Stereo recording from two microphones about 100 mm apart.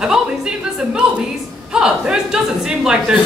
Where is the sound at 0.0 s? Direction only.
5° right (ahead or behind).